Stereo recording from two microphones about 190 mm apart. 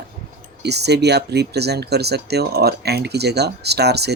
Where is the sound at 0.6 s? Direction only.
60° right (ahead or behind).